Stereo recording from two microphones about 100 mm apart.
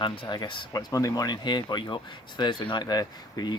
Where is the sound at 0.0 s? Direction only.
50° left (ahead or behind).